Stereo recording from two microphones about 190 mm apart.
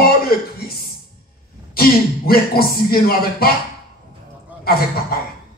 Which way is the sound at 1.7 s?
50° left (ahead or behind).